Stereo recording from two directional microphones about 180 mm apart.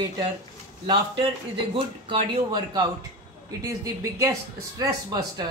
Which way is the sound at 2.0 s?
30° right (ahead or behind).